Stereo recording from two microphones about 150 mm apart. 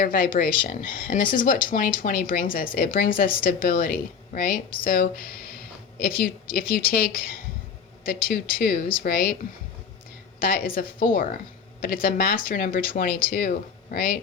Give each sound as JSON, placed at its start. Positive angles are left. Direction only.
{"t": 0.0, "sound": "a woman's voice", "side_deg": 75}
{"t": 10.4, "sound": "speech", "side_deg": 80}
{"t": 13.3, "sound": "speech", "side_deg": 90}